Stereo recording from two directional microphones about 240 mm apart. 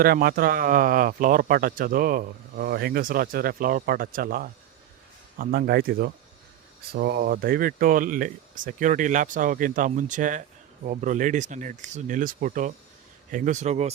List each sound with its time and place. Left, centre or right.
0.0 s speech: right